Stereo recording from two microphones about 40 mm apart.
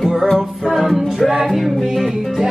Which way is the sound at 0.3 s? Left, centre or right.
Centre.